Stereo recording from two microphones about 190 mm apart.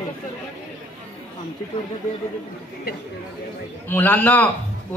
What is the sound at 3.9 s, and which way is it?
Speech, 10° left (ahead or behind).